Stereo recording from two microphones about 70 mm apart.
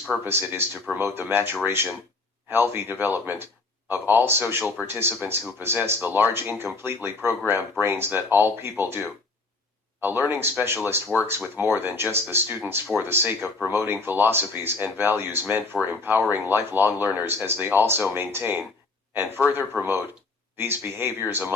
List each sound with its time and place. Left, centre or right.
0.3 s speech: right